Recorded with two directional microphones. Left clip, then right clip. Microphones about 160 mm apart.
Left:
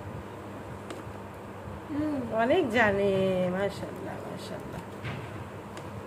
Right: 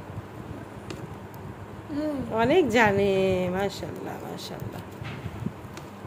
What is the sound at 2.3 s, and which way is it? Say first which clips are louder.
Speech: right 4 dB; 50° right (ahead or behind).